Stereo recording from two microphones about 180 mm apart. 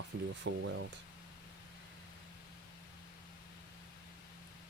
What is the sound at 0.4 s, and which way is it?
Speech, 90° right.